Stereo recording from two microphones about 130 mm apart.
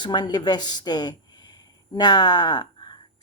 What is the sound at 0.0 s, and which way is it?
Speech, 35° left (ahead or behind).